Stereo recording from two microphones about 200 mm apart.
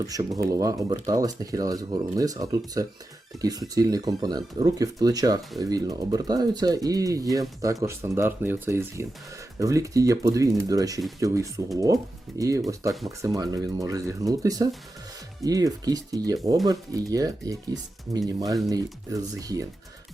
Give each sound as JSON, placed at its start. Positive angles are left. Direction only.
{"t": 0.0, "sound": "speech", "side_deg": -20}